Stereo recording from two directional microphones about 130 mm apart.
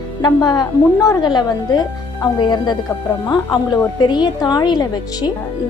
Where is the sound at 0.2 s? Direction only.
30° left (ahead or behind).